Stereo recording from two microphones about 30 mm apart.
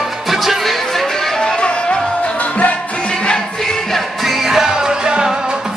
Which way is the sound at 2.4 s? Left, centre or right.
Left.